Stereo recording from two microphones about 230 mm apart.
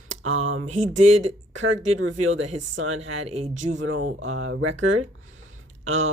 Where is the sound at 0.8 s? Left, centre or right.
Right.